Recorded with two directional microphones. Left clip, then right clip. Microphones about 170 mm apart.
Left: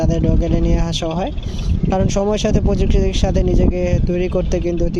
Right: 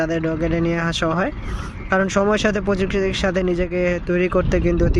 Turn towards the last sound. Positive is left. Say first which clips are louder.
# right 1 dB
turn(degrees=20)  # may be behind; listen again after turning